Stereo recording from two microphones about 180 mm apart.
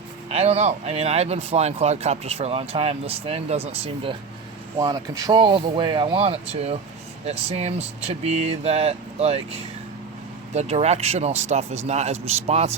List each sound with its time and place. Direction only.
0.3 s speech: 35° right (ahead or behind)
4.8 s speech: 20° right (ahead or behind)